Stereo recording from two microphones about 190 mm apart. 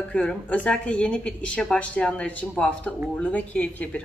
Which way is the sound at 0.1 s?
5° left (ahead or behind).